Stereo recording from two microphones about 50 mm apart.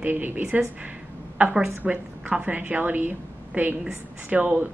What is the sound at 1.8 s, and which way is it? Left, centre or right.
Speech, centre.